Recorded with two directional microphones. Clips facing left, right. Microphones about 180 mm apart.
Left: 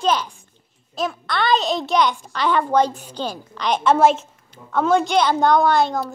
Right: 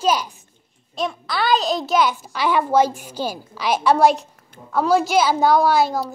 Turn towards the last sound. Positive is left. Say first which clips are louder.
# even
turn(degrees=-5)  # may be behind; listen again after turning